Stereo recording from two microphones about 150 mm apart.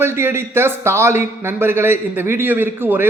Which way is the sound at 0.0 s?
15° right (ahead or behind).